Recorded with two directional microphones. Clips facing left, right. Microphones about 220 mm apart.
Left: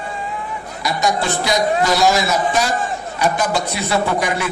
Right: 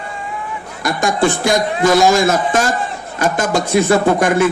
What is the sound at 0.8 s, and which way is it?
A man's voice, 50° right (ahead or behind).